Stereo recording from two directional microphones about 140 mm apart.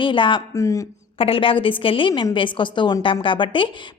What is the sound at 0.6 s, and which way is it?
Speech, 20° left (ahead or behind).